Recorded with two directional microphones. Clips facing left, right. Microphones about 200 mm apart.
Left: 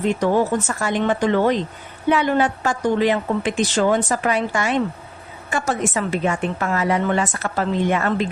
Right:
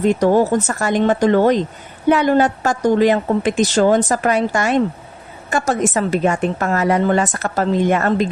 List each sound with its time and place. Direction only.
0.0 s a woman's voice: 40° right (ahead or behind)